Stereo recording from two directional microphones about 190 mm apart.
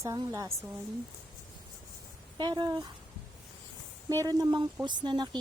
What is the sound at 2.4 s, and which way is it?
Speech, 20° right (ahead or behind).